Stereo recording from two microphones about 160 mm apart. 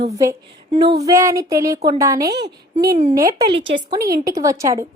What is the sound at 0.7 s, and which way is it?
A woman's voice, 30° right (ahead or behind).